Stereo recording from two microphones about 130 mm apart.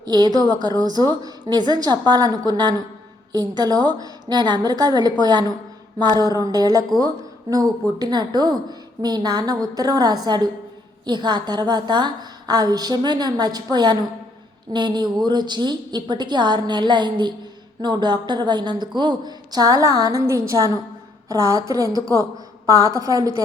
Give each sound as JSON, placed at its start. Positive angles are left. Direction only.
{"t": 0.0, "sound": "a woman's voice", "side_deg": -30}